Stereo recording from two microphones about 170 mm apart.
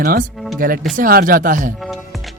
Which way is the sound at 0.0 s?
60° right (ahead or behind).